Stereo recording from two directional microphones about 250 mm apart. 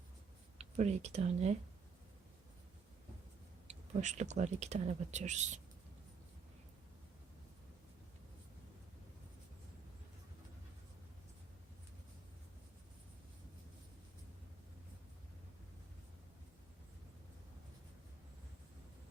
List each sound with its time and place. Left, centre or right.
0.6 s speech: right
3.7 s speech: right